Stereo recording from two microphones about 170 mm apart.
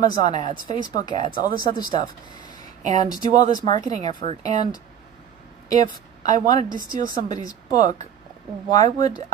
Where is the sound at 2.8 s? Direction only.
45° right (ahead or behind).